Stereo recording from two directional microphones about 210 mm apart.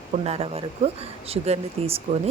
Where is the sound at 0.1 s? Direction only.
30° right (ahead or behind).